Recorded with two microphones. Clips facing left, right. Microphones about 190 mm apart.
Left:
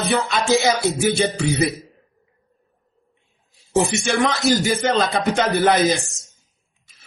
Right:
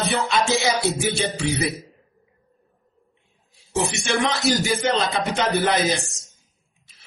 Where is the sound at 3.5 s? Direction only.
45° left (ahead or behind).